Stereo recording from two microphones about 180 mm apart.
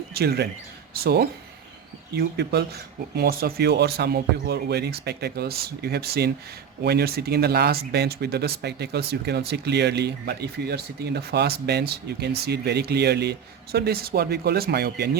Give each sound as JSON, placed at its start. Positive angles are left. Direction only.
{"t": 0.1, "sound": "speech", "side_deg": -60}